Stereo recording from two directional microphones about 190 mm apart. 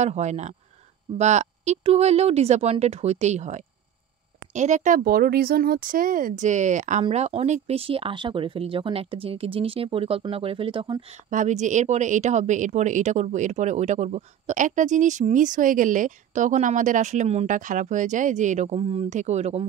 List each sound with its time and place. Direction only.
0.0 s speech: 35° right (ahead or behind)
11.2 s speech: 40° right (ahead or behind)